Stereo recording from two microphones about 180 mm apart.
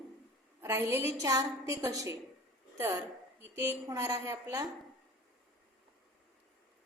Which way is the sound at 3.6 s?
15° right (ahead or behind).